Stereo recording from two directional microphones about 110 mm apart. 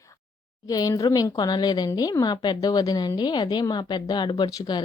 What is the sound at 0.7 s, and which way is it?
Speech, 35° left (ahead or behind).